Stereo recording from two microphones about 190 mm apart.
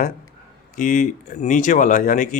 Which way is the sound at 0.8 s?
40° left (ahead or behind).